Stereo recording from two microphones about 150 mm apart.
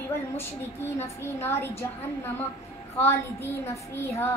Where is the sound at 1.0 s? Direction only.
15° left (ahead or behind).